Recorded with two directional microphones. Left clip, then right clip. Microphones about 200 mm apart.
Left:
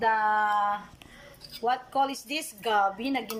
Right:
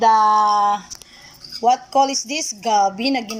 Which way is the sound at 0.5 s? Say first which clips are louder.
Right 9 dB; 25° right (ahead or behind).